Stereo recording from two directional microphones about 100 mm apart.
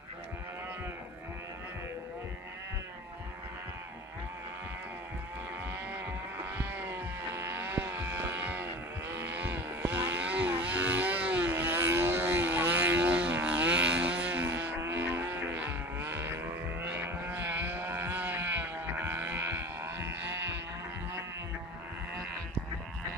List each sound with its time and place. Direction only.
6.6 s vehicle: 20° right (ahead or behind)